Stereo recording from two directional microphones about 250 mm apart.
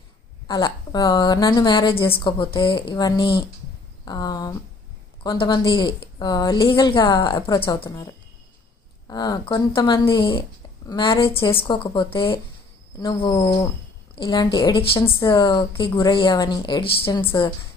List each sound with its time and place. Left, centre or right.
0.4 s a woman's voice: centre
9.0 s a woman's voice: centre